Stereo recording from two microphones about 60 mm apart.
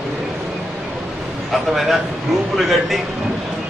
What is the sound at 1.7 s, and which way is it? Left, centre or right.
A man's voice, centre.